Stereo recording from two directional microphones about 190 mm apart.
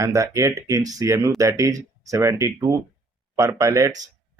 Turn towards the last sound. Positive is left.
turn(degrees=-20)  # may be behind; listen again after turning